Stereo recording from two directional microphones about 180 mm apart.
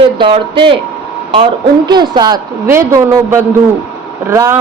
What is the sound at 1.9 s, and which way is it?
A woman's voice, 25° right (ahead or behind).